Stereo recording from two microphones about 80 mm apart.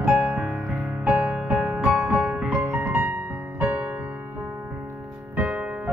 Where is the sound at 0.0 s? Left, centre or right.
Centre.